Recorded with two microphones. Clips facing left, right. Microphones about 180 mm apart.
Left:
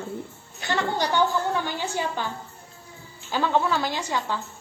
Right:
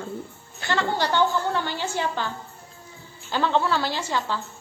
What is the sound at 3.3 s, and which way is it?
A woman's voice, 10° left (ahead or behind).